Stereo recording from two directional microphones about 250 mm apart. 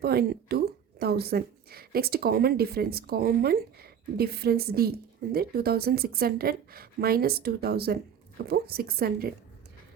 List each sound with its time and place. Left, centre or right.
0.0 s a woman's voice: right